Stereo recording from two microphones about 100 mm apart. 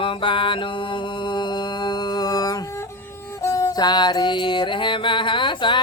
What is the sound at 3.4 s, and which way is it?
Music, 35° left (ahead or behind).